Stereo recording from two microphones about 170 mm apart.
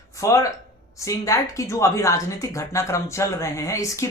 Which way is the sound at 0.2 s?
20° left (ahead or behind).